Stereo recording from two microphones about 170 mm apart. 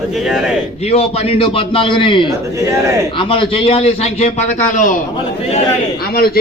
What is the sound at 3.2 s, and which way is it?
A man's voice, 30° left (ahead or behind).